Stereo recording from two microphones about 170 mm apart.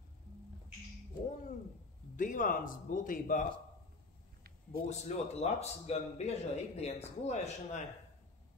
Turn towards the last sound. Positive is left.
turn(degrees=40)  # may be behind; listen again after turning